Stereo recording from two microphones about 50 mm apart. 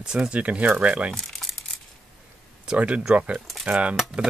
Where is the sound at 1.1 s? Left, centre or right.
Centre.